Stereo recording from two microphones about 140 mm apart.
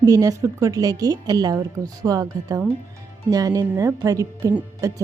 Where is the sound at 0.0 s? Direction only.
25° right (ahead or behind).